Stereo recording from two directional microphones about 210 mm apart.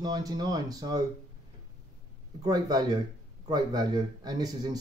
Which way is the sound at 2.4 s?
15° right (ahead or behind).